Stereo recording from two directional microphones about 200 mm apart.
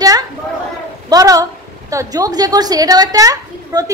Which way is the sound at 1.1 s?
15° right (ahead or behind).